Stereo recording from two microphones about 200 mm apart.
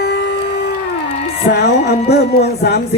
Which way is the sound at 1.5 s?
55° left (ahead or behind).